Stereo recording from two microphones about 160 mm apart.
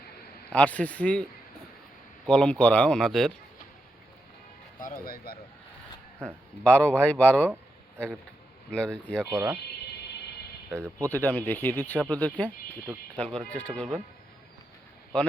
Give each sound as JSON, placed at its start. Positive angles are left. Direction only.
{"t": 0.5, "sound": "speech", "side_deg": 10}
{"t": 2.2, "sound": "speech", "side_deg": 5}
{"t": 4.8, "sound": "speech", "side_deg": 60}
{"t": 6.7, "sound": "speech", "side_deg": 10}
{"t": 8.7, "sound": "speech", "side_deg": 5}
{"t": 9.3, "sound": "speech", "side_deg": -15}
{"t": 10.7, "sound": "a man's voice", "side_deg": -15}
{"t": 11.1, "sound": "speech", "side_deg": 10}